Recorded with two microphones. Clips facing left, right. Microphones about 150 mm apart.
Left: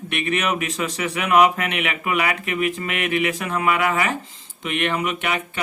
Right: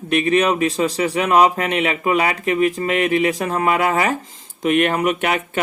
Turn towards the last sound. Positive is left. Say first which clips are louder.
# right 5 dB
turn(degrees=-40)  # may be behind; listen again after turning